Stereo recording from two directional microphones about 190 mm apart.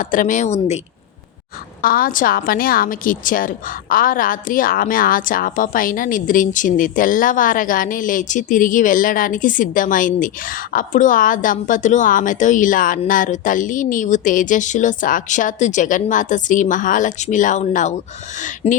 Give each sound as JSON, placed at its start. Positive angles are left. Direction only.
{"t": 0.0, "sound": "speech", "side_deg": 45}
{"t": 1.8, "sound": "a woman's voice", "side_deg": 50}